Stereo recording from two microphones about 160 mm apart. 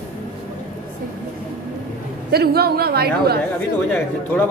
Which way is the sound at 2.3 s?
80° right.